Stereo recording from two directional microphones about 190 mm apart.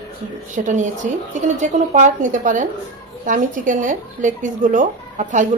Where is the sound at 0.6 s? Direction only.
40° right (ahead or behind).